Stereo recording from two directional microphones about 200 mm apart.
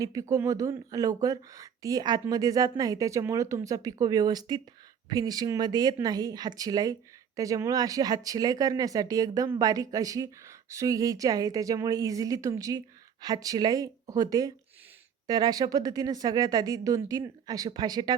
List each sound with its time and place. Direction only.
0.0 s speech: 15° right (ahead or behind)